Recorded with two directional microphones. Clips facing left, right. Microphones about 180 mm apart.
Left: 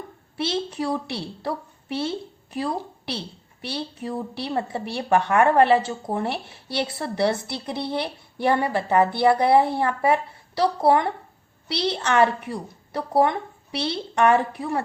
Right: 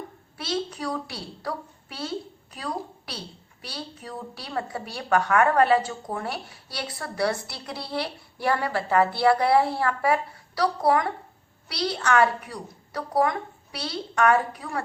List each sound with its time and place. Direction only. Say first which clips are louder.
0.3 s a woman's voice: left 4 dB; 25° left (ahead or behind)